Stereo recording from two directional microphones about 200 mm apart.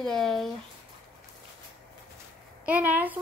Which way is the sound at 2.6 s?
5° right (ahead or behind).